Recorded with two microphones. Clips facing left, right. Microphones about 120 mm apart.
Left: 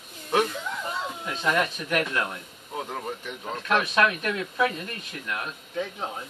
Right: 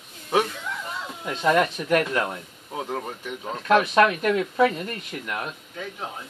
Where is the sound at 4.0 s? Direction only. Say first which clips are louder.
Right 5 dB; 25° right (ahead or behind).